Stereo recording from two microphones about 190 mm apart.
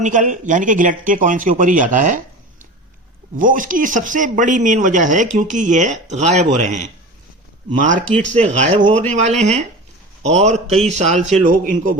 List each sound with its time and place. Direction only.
0.0 s speech: 40° right (ahead or behind)
3.3 s speech: 45° right (ahead or behind)